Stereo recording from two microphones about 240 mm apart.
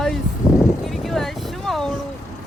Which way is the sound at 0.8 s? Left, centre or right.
Centre.